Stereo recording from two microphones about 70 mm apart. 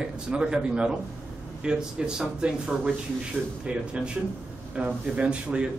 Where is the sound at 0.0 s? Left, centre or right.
Centre.